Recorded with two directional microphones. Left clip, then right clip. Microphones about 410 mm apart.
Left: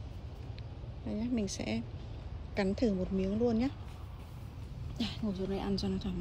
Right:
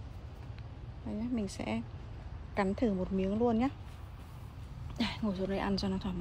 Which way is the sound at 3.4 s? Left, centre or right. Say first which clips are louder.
Right 1 dB; right.